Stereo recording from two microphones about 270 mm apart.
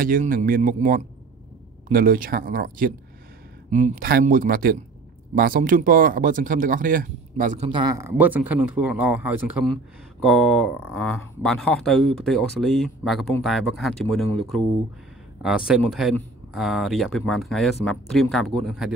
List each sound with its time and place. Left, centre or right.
0.0 s speech: right; by 18.9 s centre